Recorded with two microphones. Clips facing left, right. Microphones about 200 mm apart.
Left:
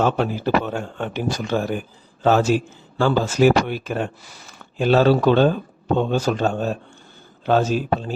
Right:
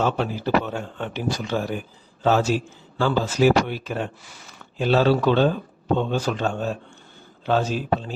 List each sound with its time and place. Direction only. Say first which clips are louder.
0.0 s speech: left 3 dB; 50° left (ahead or behind)